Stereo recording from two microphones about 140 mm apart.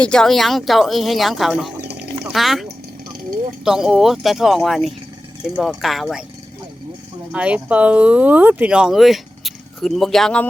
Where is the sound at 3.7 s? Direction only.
5° right (ahead or behind).